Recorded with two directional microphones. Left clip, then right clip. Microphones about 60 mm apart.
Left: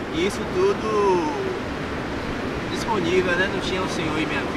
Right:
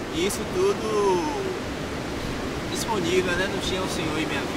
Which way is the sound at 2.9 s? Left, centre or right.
Centre.